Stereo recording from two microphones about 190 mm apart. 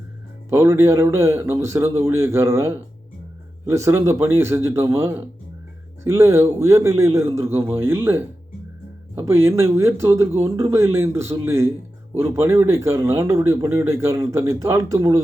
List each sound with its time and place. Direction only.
0.5 s speech: 15° right (ahead or behind)